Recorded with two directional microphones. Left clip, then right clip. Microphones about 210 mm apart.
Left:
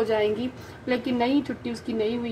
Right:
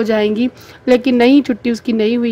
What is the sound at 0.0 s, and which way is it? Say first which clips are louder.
Speech: right 9 dB; 45° right (ahead or behind).